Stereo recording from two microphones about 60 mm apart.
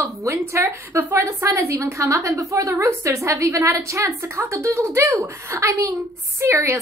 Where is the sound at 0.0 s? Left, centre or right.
Right.